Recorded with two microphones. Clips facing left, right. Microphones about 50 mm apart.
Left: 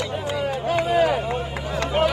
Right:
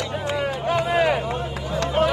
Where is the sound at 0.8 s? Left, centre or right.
Right.